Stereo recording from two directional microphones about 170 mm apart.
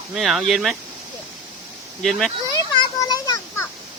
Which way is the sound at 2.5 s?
20° left (ahead or behind).